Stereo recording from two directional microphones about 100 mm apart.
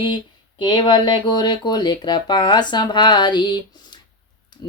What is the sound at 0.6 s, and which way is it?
Speech, 50° left (ahead or behind).